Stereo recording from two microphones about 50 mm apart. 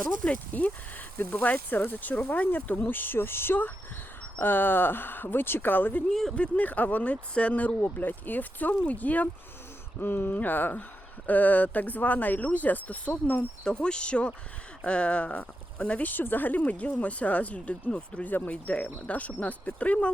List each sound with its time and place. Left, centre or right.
0.5 s speech: left
6.1 s speech: centre
6.3 s speech: left
7.8 s speech: left
10.0 s speech: left
13.7 s speech: centre
18.3 s speech: left
18.5 s speech: left